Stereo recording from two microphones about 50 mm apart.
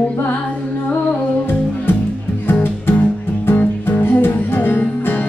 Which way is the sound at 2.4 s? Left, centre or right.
Left.